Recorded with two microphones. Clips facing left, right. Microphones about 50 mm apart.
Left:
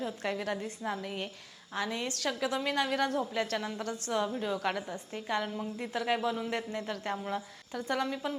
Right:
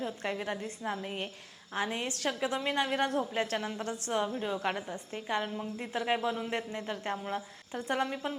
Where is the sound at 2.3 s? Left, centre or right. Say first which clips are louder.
Even; centre.